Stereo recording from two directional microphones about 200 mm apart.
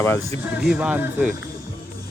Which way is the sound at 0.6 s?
5° right (ahead or behind).